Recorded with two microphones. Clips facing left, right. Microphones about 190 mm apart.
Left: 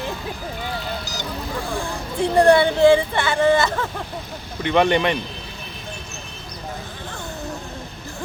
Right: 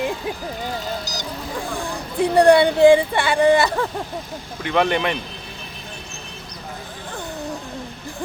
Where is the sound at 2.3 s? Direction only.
15° right (ahead or behind).